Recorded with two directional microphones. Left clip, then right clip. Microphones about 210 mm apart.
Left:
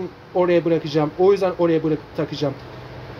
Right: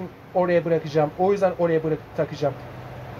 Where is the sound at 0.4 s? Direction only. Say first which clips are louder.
Left 3 dB; 25° left (ahead or behind).